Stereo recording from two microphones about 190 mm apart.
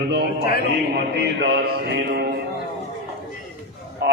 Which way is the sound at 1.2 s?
60° right (ahead or behind).